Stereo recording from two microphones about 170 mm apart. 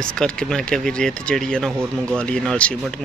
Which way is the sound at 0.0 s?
5° left (ahead or behind).